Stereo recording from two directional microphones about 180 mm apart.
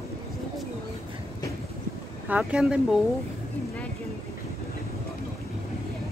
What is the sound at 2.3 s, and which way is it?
Speech, 5° right (ahead or behind).